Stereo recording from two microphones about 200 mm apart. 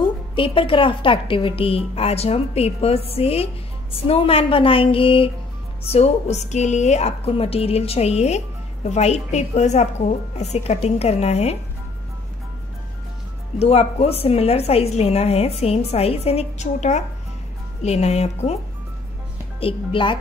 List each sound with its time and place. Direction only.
0.0 s a woman's voice: 25° left (ahead or behind)
13.6 s a woman's voice: 30° left (ahead or behind)
19.6 s a woman's voice: 25° left (ahead or behind)